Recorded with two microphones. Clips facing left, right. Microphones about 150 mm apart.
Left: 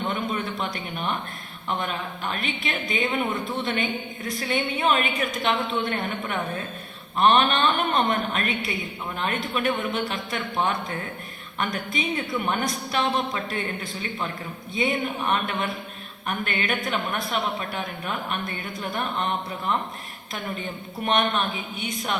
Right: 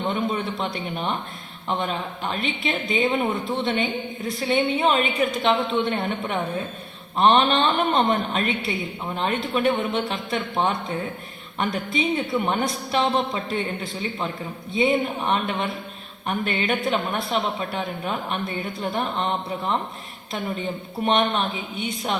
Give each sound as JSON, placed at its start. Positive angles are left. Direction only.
{"t": 0.1, "sound": "a woman's voice", "side_deg": -25}
{"t": 14.8, "sound": "a woman's voice", "side_deg": -25}
{"t": 21.0, "sound": "a woman's voice", "side_deg": -25}